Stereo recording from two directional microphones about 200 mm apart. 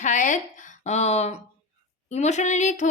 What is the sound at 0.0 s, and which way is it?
Speech, 40° left (ahead or behind).